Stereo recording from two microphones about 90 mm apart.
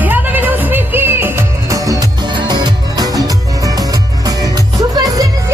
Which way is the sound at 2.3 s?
55° right (ahead or behind).